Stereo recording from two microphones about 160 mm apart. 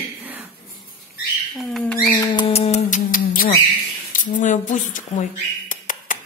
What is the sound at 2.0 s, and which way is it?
Speech, 30° left (ahead or behind).